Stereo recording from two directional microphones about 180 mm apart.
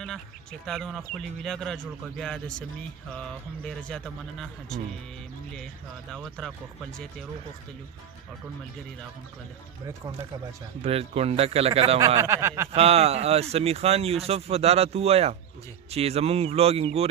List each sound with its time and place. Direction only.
0.0 s a man's voice: 5° left (ahead or behind)
6.1 s a man's voice: centre (ahead or behind)
10.8 s speech: 35° right (ahead or behind)
12.2 s speech: 15° right (ahead or behind)
12.7 s speech: 35° right (ahead or behind)